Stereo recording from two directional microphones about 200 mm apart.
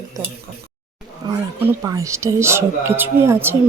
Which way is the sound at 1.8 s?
15° right (ahead or behind).